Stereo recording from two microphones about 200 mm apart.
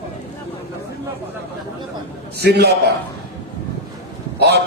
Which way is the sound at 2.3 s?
55° right (ahead or behind).